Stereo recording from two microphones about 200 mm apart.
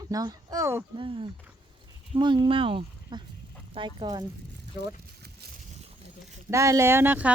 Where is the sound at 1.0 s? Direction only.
25° right (ahead or behind).